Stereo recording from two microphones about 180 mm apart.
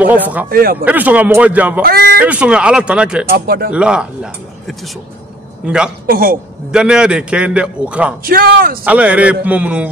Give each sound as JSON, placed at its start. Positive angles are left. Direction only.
{"t": 0.0, "sound": "a man's voice", "side_deg": -10}
{"t": 0.5, "sound": "speech", "side_deg": -55}
{"t": 0.8, "sound": "a man's voice", "side_deg": -10}
{"t": 1.8, "sound": "a sound", "side_deg": -60}
{"t": 2.2, "sound": "a man's voice", "side_deg": -5}
{"t": 3.3, "sound": "speech", "side_deg": -60}
{"t": 3.7, "sound": "a man's voice", "side_deg": -5}
{"t": 6.0, "sound": "speech", "side_deg": -55}
{"t": 6.7, "sound": "a man's voice", "side_deg": -5}
{"t": 8.2, "sound": "speech", "side_deg": -55}
{"t": 8.8, "sound": "a man's voice", "side_deg": -10}